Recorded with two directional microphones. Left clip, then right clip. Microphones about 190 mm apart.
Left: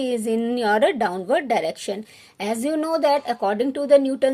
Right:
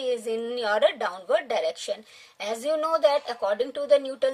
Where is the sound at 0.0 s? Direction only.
30° left (ahead or behind).